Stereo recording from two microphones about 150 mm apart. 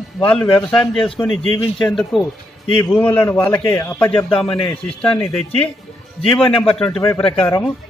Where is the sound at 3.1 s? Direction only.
15° left (ahead or behind).